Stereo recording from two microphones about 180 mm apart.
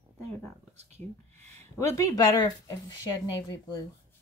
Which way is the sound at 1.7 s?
15° left (ahead or behind).